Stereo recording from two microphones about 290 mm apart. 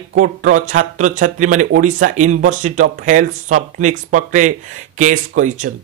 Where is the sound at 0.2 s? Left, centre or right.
Right.